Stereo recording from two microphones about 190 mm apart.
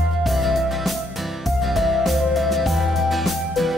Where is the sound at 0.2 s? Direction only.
Centre (ahead or behind).